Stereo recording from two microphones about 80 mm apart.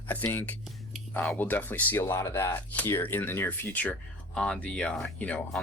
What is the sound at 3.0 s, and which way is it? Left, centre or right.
Speech, left.